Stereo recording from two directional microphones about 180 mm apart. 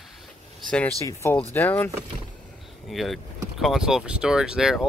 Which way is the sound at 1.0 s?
10° left (ahead or behind).